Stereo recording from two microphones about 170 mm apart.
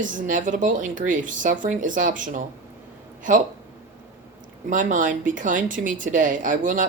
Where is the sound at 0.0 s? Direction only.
50° right (ahead or behind).